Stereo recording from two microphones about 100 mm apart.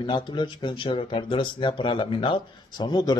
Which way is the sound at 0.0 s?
50° left (ahead or behind).